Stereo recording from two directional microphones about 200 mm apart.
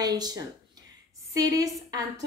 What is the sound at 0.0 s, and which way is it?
A woman's voice, 20° right (ahead or behind).